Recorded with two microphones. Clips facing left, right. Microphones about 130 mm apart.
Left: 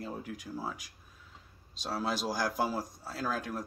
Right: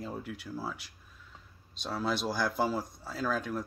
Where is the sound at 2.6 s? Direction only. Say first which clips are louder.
Right 2 dB; 5° left (ahead or behind).